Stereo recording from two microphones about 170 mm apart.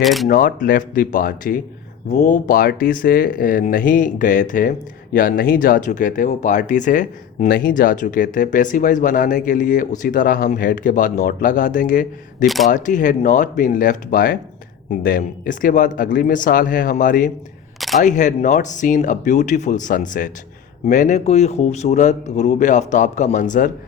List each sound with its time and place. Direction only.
0.0 s speech: centre (ahead or behind)
0.3 s speech: 55° left (ahead or behind)
17.7 s single-lens reflex camera: centre (ahead or behind)
18.0 s speech: 45° left (ahead or behind)